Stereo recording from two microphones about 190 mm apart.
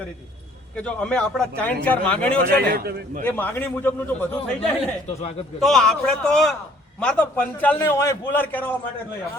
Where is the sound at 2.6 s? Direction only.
55° right (ahead or behind).